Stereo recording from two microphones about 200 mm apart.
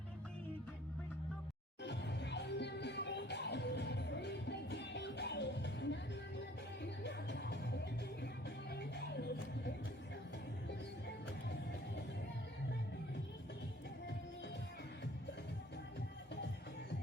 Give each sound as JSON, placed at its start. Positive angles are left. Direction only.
{"t": 1.8, "sound": "music", "side_deg": 60}
{"t": 7.0, "sound": "music", "side_deg": 60}